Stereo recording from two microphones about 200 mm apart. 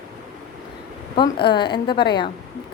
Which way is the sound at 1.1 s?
25° left (ahead or behind).